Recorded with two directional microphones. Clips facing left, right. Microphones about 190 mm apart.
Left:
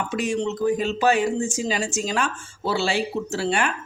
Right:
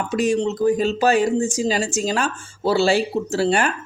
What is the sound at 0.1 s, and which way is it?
A man's voice, 40° right (ahead or behind).